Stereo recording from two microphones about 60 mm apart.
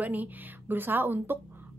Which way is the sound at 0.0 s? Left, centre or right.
Right.